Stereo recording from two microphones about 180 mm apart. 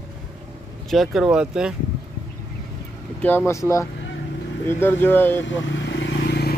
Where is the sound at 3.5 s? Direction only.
15° left (ahead or behind).